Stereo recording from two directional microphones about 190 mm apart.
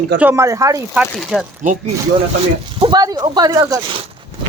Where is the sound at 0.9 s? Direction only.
Centre (ahead or behind).